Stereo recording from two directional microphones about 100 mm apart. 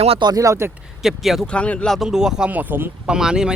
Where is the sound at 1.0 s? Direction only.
Centre (ahead or behind).